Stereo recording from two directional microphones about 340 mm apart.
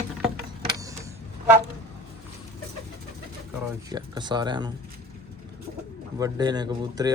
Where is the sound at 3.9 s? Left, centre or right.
Centre.